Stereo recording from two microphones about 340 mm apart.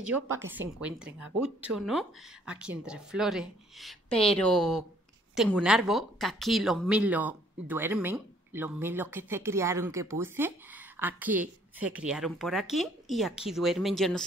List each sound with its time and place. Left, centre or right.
0.5 s speech: centre